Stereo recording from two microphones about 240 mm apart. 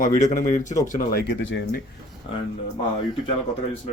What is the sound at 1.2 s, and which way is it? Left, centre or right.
Speech, left.